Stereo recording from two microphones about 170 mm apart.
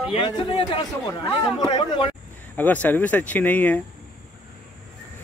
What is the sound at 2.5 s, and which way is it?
Speech, 10° left (ahead or behind).